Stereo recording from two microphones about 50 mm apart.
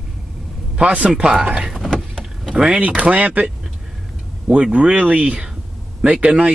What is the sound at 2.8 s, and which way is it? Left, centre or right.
Speech, right.